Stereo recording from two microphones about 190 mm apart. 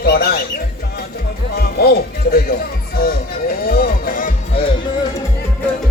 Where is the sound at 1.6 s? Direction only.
55° left (ahead or behind).